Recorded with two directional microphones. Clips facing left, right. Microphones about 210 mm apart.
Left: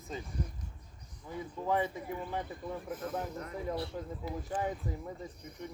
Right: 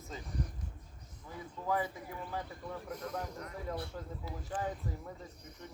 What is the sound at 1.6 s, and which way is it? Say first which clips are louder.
Speech: left 3 dB; 20° left (ahead or behind).